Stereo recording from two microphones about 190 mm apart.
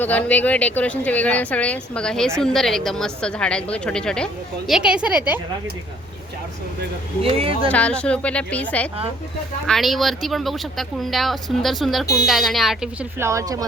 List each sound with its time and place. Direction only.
0.0 s a woman's voice: 10° left (ahead or behind); by 5.4 s 10° right (ahead or behind)
7.2 s speech: 30° right (ahead or behind)
7.7 s a woman's voice: 5° left (ahead or behind); by 13.7 s 20° right (ahead or behind)